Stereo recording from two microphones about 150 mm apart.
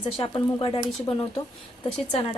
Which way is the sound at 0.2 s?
35° left (ahead or behind).